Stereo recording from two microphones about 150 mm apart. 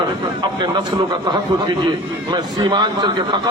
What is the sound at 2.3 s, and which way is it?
A man's voice, 30° right (ahead or behind).